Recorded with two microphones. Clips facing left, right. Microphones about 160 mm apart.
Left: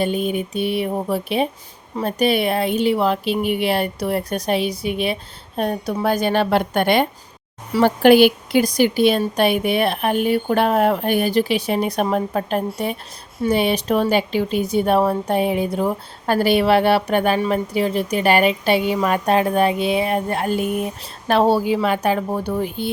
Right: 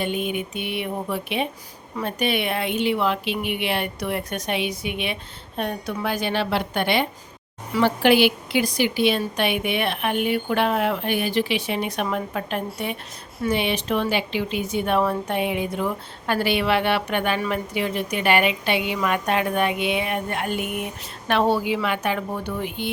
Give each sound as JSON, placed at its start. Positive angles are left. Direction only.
{"t": 0.0, "sound": "a woman's voice", "side_deg": 40}